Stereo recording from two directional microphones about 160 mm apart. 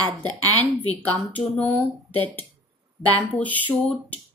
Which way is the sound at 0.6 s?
10° left (ahead or behind).